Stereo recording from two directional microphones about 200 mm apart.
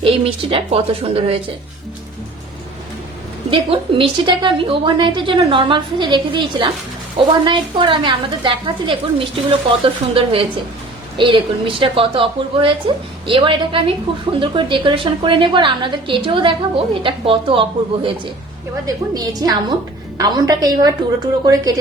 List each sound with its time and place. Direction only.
0.0 s a woman's voice: 25° right (ahead or behind)
3.5 s a woman's voice: 25° right (ahead or behind)